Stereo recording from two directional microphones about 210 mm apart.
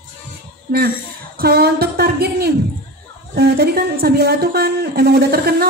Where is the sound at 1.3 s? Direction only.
50° right (ahead or behind).